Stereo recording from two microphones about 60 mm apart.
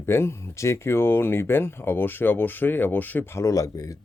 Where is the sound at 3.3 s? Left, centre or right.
Left.